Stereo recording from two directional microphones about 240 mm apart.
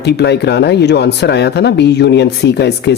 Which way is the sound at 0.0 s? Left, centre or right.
Left.